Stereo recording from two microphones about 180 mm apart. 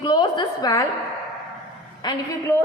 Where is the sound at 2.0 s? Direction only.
20° left (ahead or behind).